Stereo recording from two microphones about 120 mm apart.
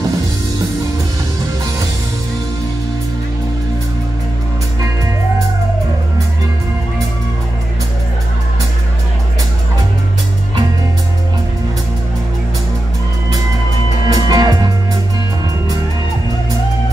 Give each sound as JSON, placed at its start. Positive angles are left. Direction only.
{"t": 14.0, "sound": "music", "side_deg": -35}